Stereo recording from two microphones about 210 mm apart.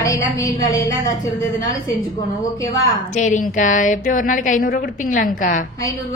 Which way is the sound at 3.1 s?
35° left (ahead or behind).